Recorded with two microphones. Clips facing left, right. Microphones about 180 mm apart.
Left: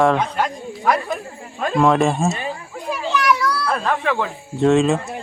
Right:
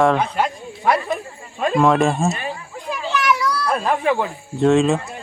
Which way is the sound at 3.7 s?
15° right (ahead or behind).